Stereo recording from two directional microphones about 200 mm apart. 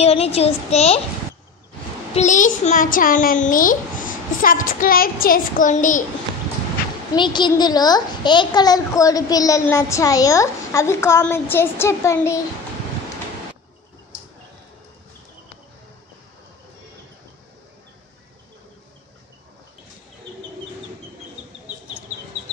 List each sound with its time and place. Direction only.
0.0 s a child's voice: 30° left (ahead or behind)
2.1 s a child's voice: 40° left (ahead or behind)
7.2 s a woman's voice: 20° left (ahead or behind)